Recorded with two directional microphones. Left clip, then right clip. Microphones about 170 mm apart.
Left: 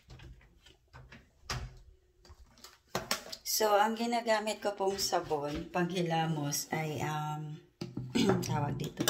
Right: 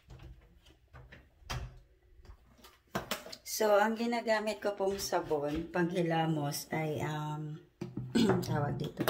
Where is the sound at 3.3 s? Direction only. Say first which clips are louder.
Even; 10° right (ahead or behind).